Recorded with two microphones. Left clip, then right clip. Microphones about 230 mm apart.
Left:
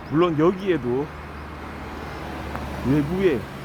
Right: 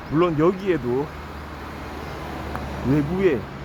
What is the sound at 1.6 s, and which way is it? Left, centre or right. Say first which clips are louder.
Vehicle: even; right.